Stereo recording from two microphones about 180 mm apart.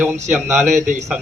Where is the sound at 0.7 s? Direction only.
45° right (ahead or behind).